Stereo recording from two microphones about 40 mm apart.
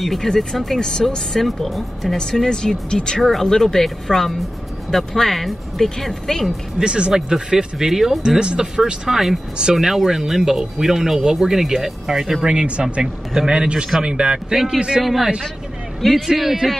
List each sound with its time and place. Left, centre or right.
0.0 s a man's voice: centre
0.3 s speech: centre
3.2 s speech: centre
6.8 s a man's voice: right; by 8.2 s centre
8.2 s speech: centre
12.4 s a man's voice: right
13.0 s a man's voice: centre
14.5 s a man's voice: centre